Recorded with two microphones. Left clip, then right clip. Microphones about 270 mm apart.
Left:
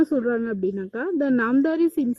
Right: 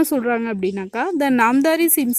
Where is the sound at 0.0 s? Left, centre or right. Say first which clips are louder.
Right 3 dB; right.